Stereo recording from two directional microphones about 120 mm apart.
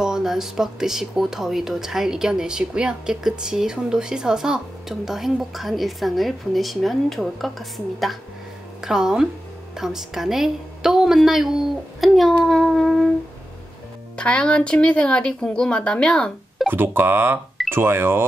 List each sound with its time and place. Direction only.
0.0 s a woman's voice: 5° right (ahead or behind)
12.4 s a sound: centre (ahead or behind)
14.1 s speech: 10° left (ahead or behind)
16.6 s speech: 15° right (ahead or behind)